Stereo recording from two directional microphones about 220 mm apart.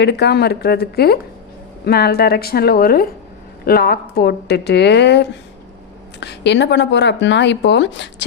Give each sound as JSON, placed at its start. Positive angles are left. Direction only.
{"t": 0.0, "sound": "speech", "side_deg": 50}